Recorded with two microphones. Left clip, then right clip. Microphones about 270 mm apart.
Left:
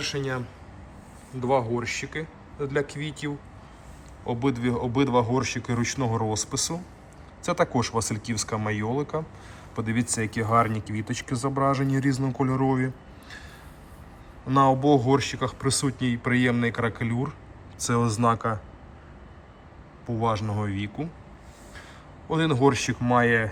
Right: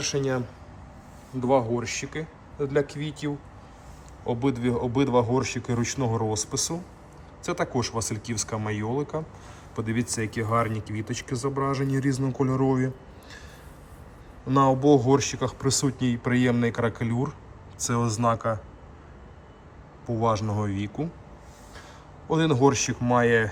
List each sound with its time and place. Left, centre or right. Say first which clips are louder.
0.2 s speech: right 3 dB; centre
14.4 s speech: even; centre
20.1 s speech: right 1 dB; centre
22.4 s speech: even; centre